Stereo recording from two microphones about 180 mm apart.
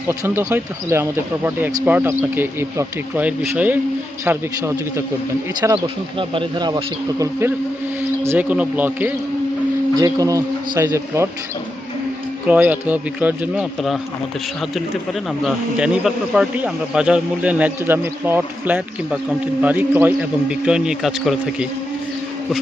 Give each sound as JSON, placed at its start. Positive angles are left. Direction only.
{"t": 0.1, "sound": "speech", "side_deg": -15}
{"t": 5.5, "sound": "speech", "side_deg": -25}
{"t": 9.9, "sound": "speech", "side_deg": -20}
{"t": 12.5, "sound": "speech", "side_deg": -10}
{"t": 15.4, "sound": "a man's voice", "side_deg": -5}